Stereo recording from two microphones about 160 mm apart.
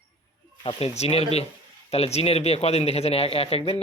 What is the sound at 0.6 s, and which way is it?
Speech, 35° left (ahead or behind).